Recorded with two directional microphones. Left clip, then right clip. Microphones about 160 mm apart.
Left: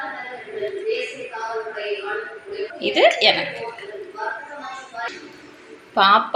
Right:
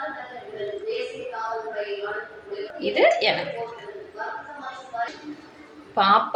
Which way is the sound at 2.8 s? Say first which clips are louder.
Left 4 dB; 25° left (ahead or behind).